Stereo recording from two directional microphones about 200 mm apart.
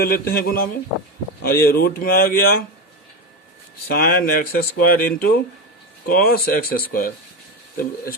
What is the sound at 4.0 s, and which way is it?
Speech, 50° left (ahead or behind).